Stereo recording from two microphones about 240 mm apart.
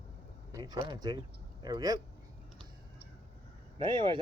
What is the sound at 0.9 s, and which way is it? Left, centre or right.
Speech, centre.